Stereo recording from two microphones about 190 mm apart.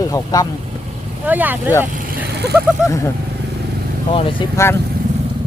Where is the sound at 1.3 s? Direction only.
10° right (ahead or behind).